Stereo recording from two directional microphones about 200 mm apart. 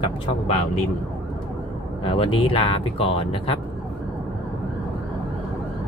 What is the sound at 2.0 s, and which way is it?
Speech, 25° left (ahead or behind).